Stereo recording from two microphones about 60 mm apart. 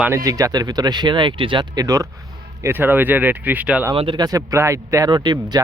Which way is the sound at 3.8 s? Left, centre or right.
Right.